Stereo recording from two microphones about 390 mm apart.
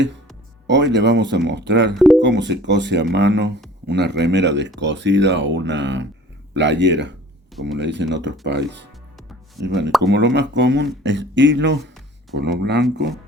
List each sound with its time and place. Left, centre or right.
0.7 s speech: right